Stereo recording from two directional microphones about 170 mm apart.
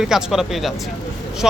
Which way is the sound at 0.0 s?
5° right (ahead or behind).